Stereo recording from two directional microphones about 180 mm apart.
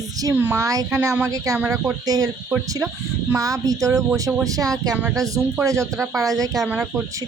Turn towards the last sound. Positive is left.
turn(degrees=-5)  # may be behind; listen again after turning